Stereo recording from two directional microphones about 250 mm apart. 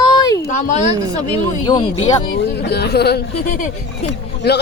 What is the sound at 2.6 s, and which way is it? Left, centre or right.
A man's voice, left.